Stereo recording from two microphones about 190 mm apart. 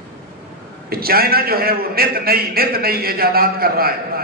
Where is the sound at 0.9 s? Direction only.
55° right (ahead or behind).